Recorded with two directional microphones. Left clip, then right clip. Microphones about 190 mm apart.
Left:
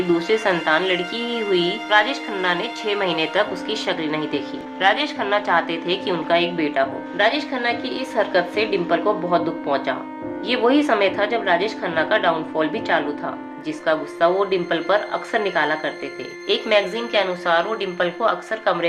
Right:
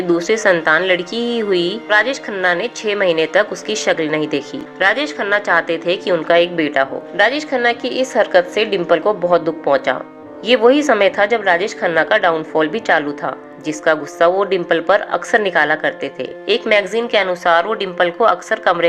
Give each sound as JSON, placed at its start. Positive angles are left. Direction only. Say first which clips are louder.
{"t": 0.1, "sound": "a woman's voice", "louder": "right 6 dB", "side_deg": -30}
{"t": 4.8, "sound": "a woman's voice", "louder": "right 3 dB", "side_deg": -25}